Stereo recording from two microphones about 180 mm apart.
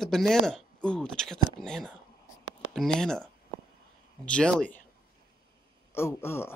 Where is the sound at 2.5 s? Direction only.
90° left.